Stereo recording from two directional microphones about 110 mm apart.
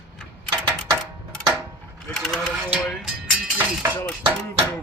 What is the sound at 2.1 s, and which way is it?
Sewing machine, 5° left (ahead or behind).